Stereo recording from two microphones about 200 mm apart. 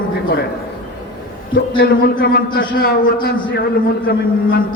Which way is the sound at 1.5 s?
50° left (ahead or behind).